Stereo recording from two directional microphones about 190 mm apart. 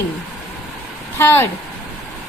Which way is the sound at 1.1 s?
10° left (ahead or behind).